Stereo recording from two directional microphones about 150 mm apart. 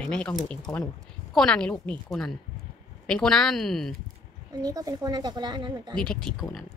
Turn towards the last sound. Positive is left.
turn(degrees=5)  # may be behind; listen again after turning